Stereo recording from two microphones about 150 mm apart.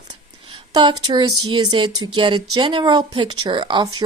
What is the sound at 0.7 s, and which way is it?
Speech, 30° right (ahead or behind).